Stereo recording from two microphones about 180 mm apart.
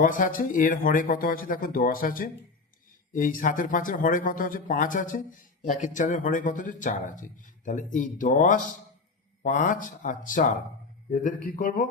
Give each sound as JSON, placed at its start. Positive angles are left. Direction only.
{"t": 0.0, "sound": "speech", "side_deg": 50}